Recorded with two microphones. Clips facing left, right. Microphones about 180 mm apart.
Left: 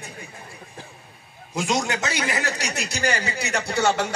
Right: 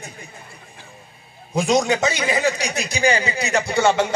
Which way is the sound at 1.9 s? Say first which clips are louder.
Right 6 dB; 60° right (ahead or behind).